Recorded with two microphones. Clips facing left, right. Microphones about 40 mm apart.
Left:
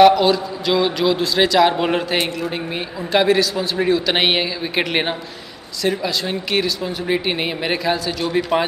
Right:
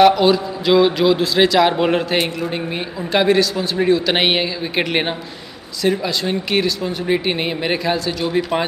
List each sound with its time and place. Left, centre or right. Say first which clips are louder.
0.0 s speech: even; centre